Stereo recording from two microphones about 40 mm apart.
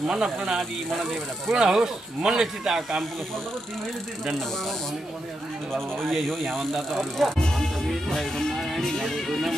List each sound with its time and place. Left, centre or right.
0.0 s speech: centre
1.5 s speech: centre
5.7 s speech: centre
7.5 s music: centre